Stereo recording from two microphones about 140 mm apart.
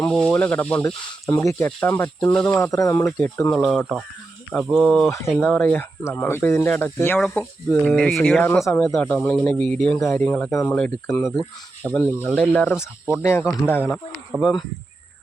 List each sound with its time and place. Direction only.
0.0 s speech: 5° left (ahead or behind)
1.3 s speech: 20° left (ahead or behind)
2.7 s speech: 25° left (ahead or behind)
3.5 s speech: 5° left (ahead or behind)
5.0 s speech: 20° left (ahead or behind)
7.9 s speech: 5° left (ahead or behind)
8.6 s speech: 20° left (ahead or behind)
9.0 s speech: 10° left (ahead or behind)
10.5 s speech: 20° left (ahead or behind)
14.3 s speech: 5° right (ahead or behind)